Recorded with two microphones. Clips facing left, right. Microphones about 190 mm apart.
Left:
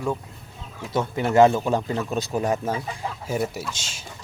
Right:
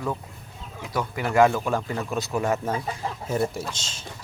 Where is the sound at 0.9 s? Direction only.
25° left (ahead or behind); by 3.6 s 10° left (ahead or behind).